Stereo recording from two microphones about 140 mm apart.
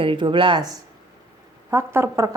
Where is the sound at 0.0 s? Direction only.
40° right (ahead or behind).